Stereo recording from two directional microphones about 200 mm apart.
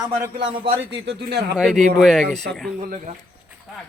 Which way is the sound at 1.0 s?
55° right (ahead or behind).